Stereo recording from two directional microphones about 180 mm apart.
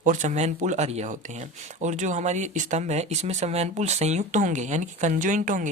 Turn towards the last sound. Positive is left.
turn(degrees=-45)  # may be behind; listen again after turning